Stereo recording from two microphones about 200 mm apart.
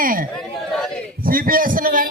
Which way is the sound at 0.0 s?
45° right (ahead or behind).